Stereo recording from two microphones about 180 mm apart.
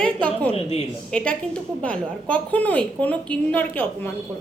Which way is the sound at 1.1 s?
5° left (ahead or behind).